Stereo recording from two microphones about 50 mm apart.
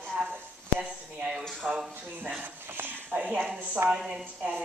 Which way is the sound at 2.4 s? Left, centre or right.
Right.